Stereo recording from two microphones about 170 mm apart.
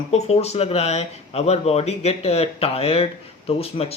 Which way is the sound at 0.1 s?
40° left (ahead or behind).